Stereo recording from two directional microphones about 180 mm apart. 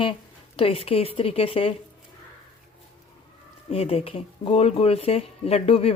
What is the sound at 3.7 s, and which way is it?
Speech, 35° left (ahead or behind).